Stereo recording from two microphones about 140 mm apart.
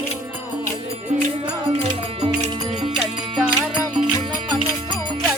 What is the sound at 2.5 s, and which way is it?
Music, 35° right (ahead or behind).